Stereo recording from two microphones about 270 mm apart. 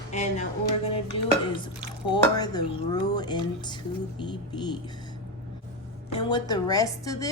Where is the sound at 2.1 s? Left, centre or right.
Centre.